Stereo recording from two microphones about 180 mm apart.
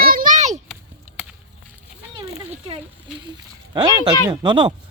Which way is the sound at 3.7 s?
20° right (ahead or behind).